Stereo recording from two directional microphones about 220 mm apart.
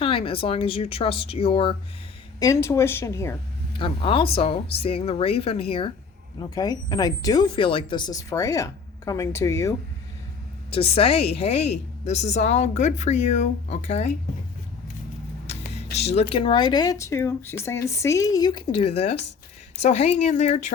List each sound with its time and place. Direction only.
0.0 s speech: 25° left (ahead or behind)
2.4 s speech: 15° left (ahead or behind)
10.7 s speech: 25° left (ahead or behind)
16.0 s speech: 30° left (ahead or behind)